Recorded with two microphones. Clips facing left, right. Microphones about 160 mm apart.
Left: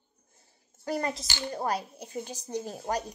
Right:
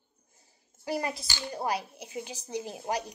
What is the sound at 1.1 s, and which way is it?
Speech, 20° left (ahead or behind).